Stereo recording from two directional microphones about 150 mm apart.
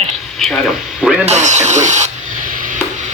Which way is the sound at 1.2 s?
50° right (ahead or behind).